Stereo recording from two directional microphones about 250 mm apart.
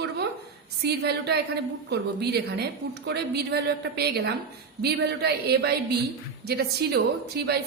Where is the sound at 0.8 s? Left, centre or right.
Right.